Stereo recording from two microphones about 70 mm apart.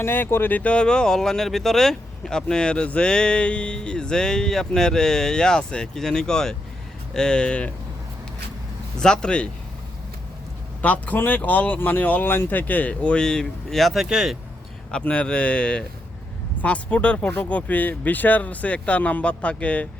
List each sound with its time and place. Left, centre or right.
0.0 s speech: left; by 7.7 s centre
9.0 s speech: centre
10.8 s speech: left; by 14.3 s centre
14.8 s speech: centre